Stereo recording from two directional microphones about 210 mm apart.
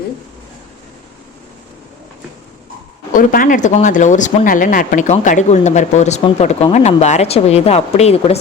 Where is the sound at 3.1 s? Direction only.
40° left (ahead or behind).